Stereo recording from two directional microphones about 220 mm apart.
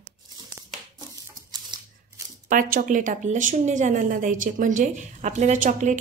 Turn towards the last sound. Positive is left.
turn(degrees=-35)  # may be behind; listen again after turning